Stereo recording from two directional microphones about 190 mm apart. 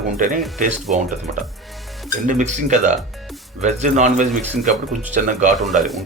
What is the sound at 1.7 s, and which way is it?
Music, centre (ahead or behind).